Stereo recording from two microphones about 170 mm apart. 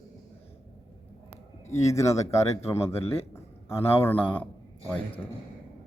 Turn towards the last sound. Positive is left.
turn(degrees=10)  # may be behind; listen again after turning